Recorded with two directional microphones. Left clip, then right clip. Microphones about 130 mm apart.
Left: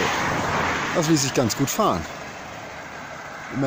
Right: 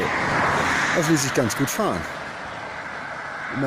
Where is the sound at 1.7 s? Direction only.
15° left (ahead or behind).